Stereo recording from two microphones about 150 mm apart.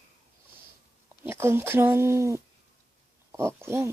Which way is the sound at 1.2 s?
15° right (ahead or behind).